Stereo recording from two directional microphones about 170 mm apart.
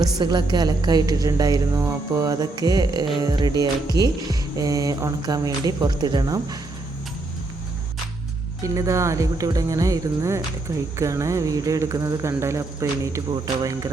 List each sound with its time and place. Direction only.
0.2 s a woman's voice: 25° right (ahead or behind)
8.6 s a woman's voice: 20° right (ahead or behind)